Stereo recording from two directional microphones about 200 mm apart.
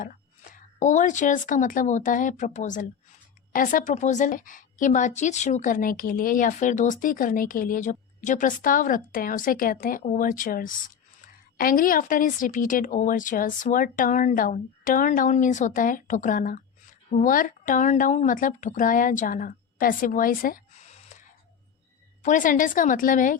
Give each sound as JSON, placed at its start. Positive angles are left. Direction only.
{"t": 0.0, "sound": "a woman's voice", "side_deg": 40}
{"t": 22.2, "sound": "a woman's voice", "side_deg": 40}